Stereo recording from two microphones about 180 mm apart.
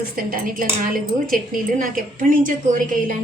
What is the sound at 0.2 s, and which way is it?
A woman's voice, 50° right (ahead or behind).